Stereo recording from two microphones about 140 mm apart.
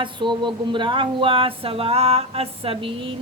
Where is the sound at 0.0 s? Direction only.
35° right (ahead or behind).